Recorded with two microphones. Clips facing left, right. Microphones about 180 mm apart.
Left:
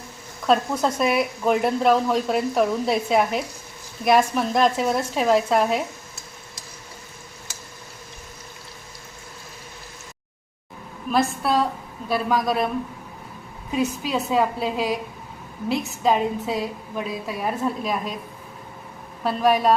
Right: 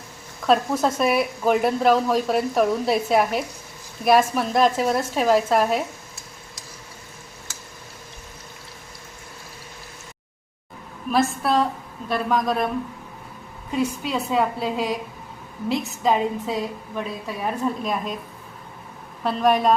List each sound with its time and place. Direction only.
0.4 s a woman's voice: centre (ahead or behind)
11.1 s a woman's voice: centre (ahead or behind)
13.7 s a woman's voice: 5° left (ahead or behind)
19.2 s a woman's voice: 5° left (ahead or behind)